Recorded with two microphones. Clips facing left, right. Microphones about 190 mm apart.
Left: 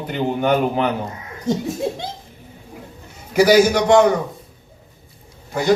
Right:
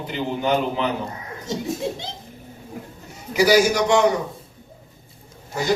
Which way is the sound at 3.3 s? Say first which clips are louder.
Left 3 dB; 55° left (ahead or behind).